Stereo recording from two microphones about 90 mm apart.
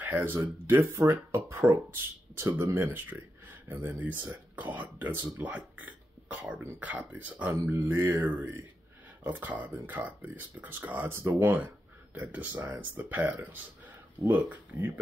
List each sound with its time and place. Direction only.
0.0 s speech: 20° right (ahead or behind)